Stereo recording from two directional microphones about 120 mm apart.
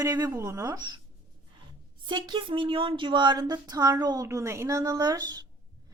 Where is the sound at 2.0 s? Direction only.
40° right (ahead or behind).